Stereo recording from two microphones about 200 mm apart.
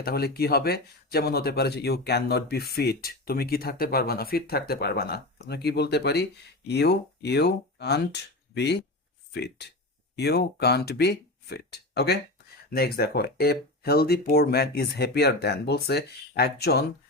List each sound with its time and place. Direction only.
0.0 s speech: 50° left (ahead or behind)